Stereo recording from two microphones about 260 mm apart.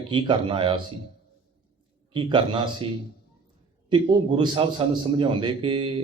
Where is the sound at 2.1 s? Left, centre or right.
Centre.